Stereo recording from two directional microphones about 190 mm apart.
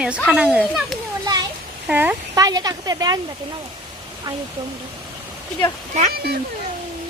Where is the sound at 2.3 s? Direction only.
20° right (ahead or behind).